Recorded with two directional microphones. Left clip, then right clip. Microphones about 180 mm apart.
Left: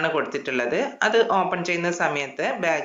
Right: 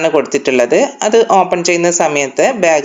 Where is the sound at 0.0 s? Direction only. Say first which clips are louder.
Right 12 dB; 35° right (ahead or behind).